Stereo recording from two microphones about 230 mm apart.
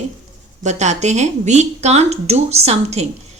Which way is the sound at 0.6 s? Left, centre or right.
Right.